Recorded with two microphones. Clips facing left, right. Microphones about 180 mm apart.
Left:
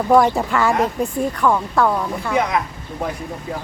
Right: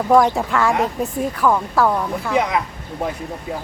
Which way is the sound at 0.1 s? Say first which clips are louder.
Even; centre (ahead or behind).